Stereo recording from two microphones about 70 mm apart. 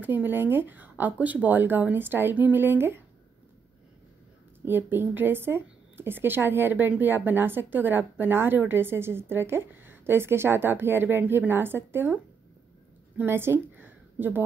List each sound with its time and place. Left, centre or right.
0.0 s speech: right
4.6 s speech: right
13.2 s a woman's voice: right